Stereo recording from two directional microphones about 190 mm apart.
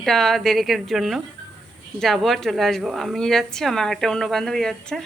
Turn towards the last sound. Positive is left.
turn(degrees=5)  # may be behind; listen again after turning